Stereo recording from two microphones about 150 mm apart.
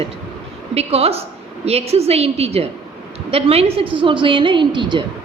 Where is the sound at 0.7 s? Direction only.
40° right (ahead or behind).